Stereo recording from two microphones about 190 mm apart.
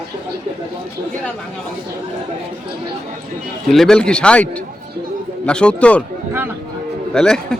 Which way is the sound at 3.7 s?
Centre (ahead or behind).